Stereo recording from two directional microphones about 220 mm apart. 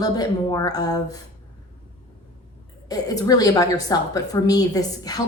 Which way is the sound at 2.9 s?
15° left (ahead or behind).